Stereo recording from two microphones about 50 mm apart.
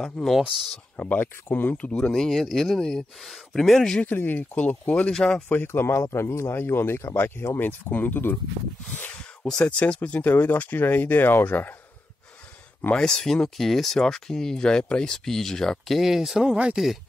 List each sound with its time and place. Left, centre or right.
0.2 s speech: centre
0.5 s speech: centre
0.9 s speech: left
1.8 s speech: left
2.1 s speech: centre
4.0 s speech: left
5.1 s speech: centre
5.7 s speech: left
6.5 s speech: left
9.4 s speech: centre
9.8 s speech: left
10.2 s speech: left
12.9 s speech: centre
16.0 s speech: centre